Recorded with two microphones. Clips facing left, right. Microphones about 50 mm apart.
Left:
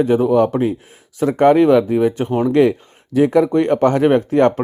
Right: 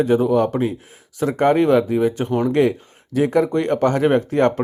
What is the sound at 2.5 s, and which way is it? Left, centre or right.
Speech, left.